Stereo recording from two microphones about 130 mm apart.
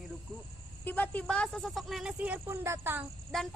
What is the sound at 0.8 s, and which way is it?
Speech, 15° left (ahead or behind).